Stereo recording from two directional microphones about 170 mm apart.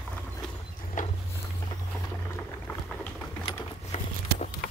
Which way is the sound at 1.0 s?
50° left (ahead or behind).